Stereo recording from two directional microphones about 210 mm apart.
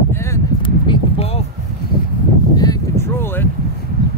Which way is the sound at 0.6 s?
25° left (ahead or behind).